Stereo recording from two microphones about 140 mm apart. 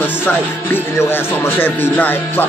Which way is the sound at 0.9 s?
15° left (ahead or behind).